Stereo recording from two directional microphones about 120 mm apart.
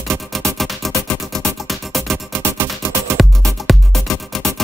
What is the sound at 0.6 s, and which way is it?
Music, centre (ahead or behind).